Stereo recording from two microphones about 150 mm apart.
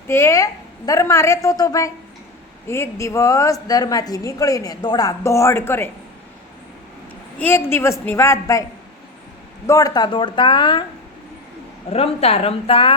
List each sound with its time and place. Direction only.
0.1 s a woman's voice: 20° left (ahead or behind)
7.3 s a woman's voice: 15° left (ahead or behind)
9.6 s speech: 20° left (ahead or behind)
11.9 s speech: 40° left (ahead or behind)